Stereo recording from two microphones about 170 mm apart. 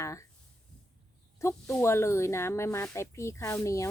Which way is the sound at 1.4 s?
15° left (ahead or behind).